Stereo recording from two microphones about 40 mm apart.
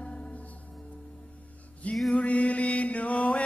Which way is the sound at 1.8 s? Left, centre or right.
Left.